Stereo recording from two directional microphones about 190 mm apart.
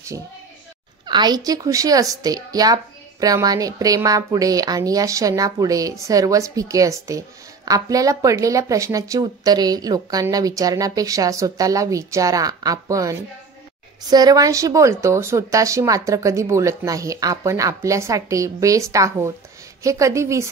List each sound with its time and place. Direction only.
0.1 s a woman's voice: 15° right (ahead or behind)